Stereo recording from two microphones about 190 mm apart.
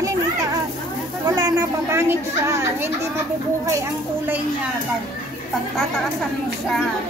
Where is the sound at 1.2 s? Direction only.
20° right (ahead or behind).